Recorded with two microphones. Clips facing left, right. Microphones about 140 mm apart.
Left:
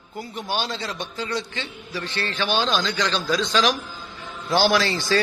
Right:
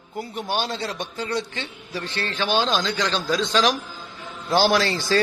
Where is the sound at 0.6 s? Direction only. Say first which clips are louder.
Right 2 dB; 55° right (ahead or behind).